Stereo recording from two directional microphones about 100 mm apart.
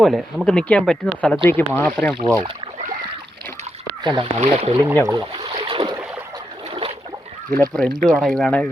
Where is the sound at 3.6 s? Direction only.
90° right.